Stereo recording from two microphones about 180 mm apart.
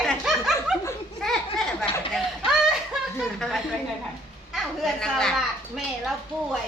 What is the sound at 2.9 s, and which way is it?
Chuckle, 5° right (ahead or behind).